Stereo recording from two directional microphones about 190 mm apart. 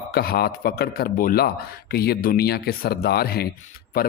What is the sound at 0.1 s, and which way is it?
A man's voice, 55° left (ahead or behind).